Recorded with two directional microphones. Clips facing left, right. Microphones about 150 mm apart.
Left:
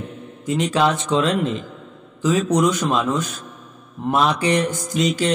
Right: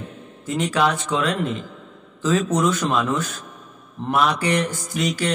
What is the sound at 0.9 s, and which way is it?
Speech, 25° left (ahead or behind).